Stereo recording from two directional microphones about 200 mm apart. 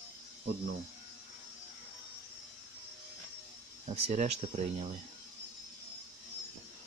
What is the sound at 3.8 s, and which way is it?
Speech, 35° right (ahead or behind).